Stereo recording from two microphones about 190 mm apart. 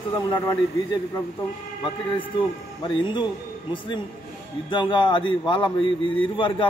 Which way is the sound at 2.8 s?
25° left (ahead or behind).